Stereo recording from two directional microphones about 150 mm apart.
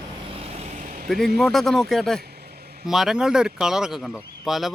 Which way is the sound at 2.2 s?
90° right.